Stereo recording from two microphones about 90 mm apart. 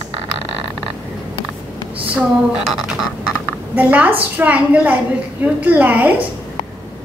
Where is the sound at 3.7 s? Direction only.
15° right (ahead or behind).